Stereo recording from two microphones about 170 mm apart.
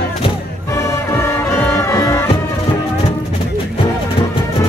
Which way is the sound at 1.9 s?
15° left (ahead or behind).